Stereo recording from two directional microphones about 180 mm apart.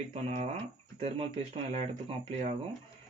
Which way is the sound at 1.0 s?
35° right (ahead or behind).